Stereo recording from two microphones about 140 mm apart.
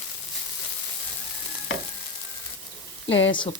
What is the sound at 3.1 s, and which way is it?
Speech, 35° left (ahead or behind).